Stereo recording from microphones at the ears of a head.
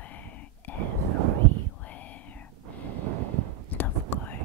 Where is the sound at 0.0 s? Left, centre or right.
Left.